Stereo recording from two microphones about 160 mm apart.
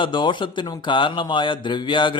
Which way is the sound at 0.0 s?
30° left (ahead or behind).